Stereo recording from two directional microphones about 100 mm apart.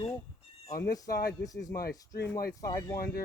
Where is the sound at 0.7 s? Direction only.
35° left (ahead or behind).